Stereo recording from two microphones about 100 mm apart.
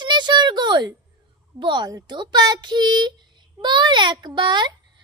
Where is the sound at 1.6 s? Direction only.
50° right (ahead or behind).